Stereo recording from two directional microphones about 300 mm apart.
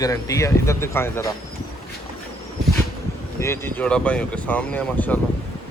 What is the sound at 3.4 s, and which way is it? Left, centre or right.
Speech, centre.